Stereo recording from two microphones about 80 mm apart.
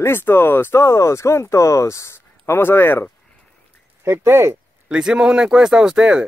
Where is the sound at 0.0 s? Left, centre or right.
Left.